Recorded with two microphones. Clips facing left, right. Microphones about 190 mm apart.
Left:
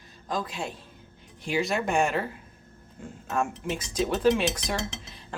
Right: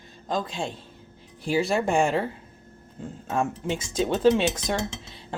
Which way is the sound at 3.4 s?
25° right (ahead or behind).